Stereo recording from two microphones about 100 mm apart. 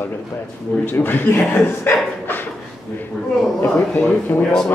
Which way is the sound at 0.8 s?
20° left (ahead or behind).